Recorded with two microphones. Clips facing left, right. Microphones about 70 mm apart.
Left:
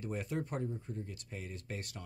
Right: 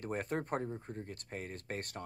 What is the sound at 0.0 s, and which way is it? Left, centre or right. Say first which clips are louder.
Speech: right 1 dB; right.